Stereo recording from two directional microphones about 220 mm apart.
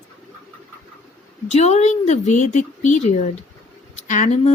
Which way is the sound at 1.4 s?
30° left (ahead or behind).